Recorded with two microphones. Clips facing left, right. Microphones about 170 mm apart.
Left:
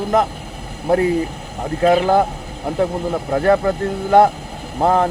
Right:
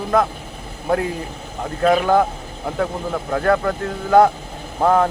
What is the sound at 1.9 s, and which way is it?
Speech, 30° left (ahead or behind).